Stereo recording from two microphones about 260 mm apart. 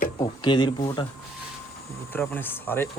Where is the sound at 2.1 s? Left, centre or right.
Centre.